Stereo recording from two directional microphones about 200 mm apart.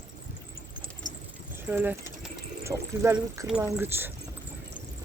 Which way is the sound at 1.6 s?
10° right (ahead or behind).